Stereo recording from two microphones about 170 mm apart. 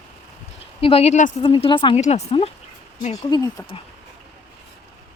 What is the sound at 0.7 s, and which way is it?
Speech, 35° left (ahead or behind).